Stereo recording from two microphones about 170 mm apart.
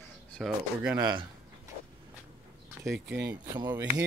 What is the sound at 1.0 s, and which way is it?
Speech, 25° right (ahead or behind).